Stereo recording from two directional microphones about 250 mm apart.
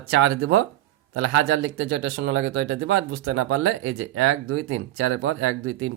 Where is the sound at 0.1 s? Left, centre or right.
Right.